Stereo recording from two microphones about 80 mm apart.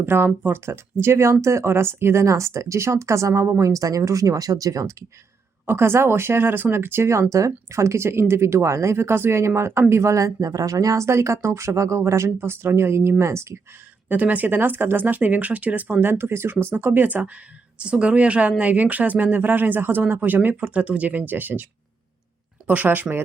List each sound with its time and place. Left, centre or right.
0.0 s speech: right
5.6 s speech: right
14.1 s speech: right